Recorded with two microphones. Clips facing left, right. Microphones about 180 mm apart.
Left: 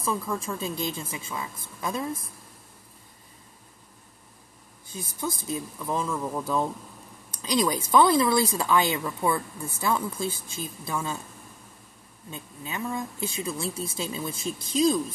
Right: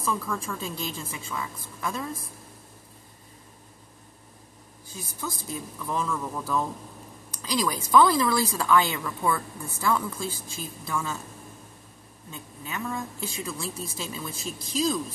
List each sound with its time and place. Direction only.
0.0 s a woman's voice: 20° left (ahead or behind)
5.5 s a woman's voice: 20° left (ahead or behind)
12.3 s a woman's voice: 20° left (ahead or behind)